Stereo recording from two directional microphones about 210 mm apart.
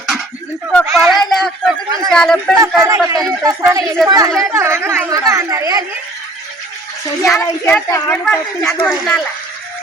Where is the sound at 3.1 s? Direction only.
15° right (ahead or behind).